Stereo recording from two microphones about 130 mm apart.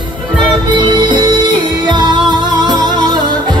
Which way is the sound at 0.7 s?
35° right (ahead or behind).